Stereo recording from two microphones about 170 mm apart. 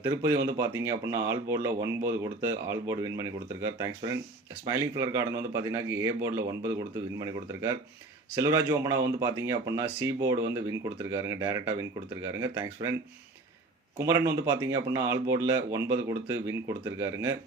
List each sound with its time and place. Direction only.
0.0 s a man's voice: 15° right (ahead or behind)
14.0 s speech: 15° right (ahead or behind)